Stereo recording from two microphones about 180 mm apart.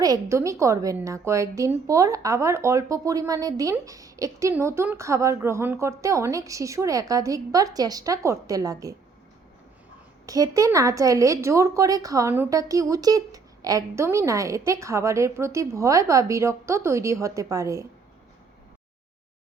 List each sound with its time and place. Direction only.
0.0 s a woman's voice: 20° right (ahead or behind)
10.2 s a woman's voice: 20° right (ahead or behind)